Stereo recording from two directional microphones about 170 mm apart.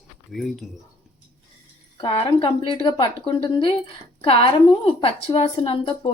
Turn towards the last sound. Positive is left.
turn(degrees=30)  # may be behind; listen again after turning